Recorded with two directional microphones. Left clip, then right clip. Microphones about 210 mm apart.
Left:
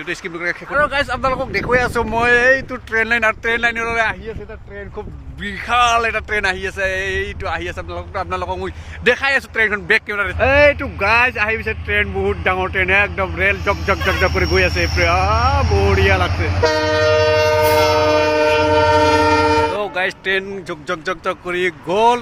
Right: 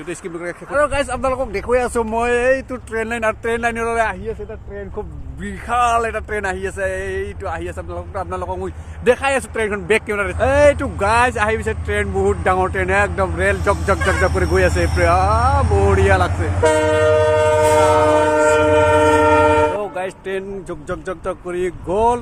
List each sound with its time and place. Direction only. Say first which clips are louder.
0.1 s speech: left 5 dB; 5° right (ahead or behind)
5.4 s speech: left 2 dB; 5° left (ahead or behind)
16.7 s train: even; 15° right (ahead or behind)
17.5 s train: right 1 dB; centre (ahead or behind); by 19.0 s 15° right (ahead or behind)
19.0 s train: right 1 dB; 30° right (ahead or behind)
19.8 s speech: left 4 dB; centre (ahead or behind)